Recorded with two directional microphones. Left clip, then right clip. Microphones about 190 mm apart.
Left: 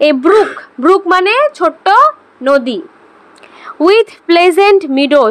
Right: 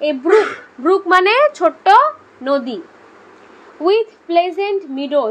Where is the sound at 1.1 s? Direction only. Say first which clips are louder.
Left 2 dB; 10° left (ahead or behind); by 2.8 s 35° left (ahead or behind).